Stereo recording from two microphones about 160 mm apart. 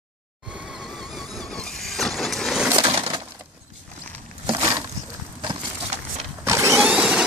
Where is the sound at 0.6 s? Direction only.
Centre (ahead or behind).